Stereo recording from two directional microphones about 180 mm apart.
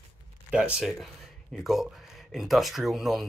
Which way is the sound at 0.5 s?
5° right (ahead or behind).